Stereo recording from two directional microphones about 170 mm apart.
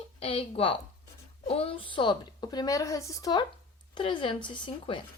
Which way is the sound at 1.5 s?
35° left (ahead or behind).